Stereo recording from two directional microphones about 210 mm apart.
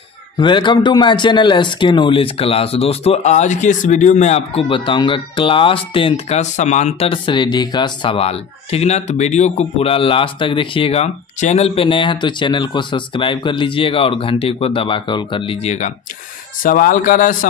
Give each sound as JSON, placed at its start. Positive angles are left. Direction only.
{"t": 0.4, "sound": "speech", "side_deg": 20}